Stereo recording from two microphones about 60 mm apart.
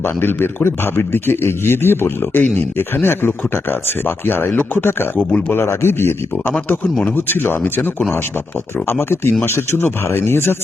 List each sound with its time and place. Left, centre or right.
0.0 s speech: left